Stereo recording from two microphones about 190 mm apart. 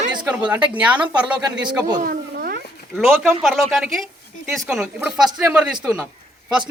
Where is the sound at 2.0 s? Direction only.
50° right (ahead or behind).